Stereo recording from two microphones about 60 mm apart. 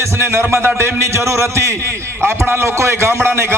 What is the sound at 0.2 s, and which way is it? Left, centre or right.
A man's voice, right.